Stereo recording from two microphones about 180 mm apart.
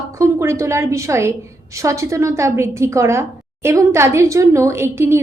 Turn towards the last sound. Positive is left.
turn(degrees=-15)  # may be behind; listen again after turning